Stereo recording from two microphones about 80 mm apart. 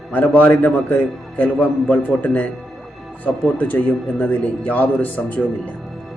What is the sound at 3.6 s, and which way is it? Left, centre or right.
Speech, centre.